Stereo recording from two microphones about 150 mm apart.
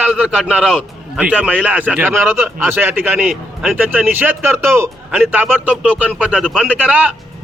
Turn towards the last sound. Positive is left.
turn(degrees=-10)  # may be behind; listen again after turning